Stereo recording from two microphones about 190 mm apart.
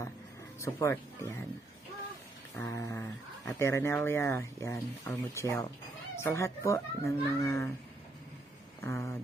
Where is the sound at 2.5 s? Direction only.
15° left (ahead or behind).